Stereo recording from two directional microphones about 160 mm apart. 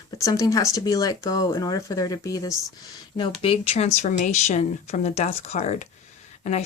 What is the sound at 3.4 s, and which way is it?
Speech, 40° left (ahead or behind).